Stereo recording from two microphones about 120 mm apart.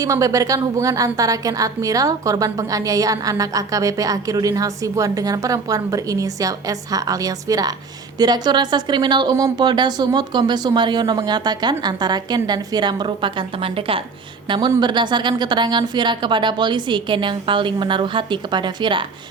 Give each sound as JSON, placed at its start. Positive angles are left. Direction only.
{"t": 0.0, "sound": "a woman's voice", "side_deg": -30}